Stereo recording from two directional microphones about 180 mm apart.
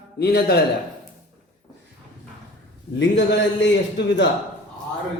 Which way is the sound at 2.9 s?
90° left.